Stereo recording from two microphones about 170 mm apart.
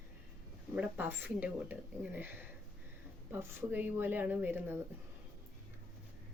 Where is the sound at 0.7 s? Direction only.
10° right (ahead or behind).